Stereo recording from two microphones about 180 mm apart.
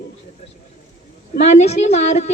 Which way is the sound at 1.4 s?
40° left (ahead or behind).